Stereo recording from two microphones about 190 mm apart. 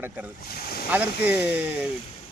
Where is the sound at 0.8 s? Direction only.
10° right (ahead or behind).